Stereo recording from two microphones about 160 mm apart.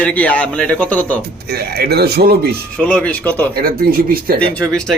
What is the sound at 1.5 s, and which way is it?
Speech, 80° right.